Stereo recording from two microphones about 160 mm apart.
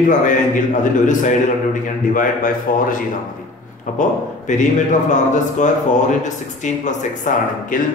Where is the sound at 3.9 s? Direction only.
50° left (ahead or behind).